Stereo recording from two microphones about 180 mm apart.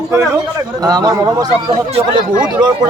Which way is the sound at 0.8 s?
20° right (ahead or behind).